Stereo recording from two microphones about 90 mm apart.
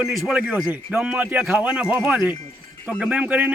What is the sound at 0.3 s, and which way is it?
A man's voice, 15° right (ahead or behind).